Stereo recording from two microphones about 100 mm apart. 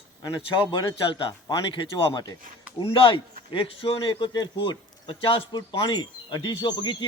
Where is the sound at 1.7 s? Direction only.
45° left (ahead or behind).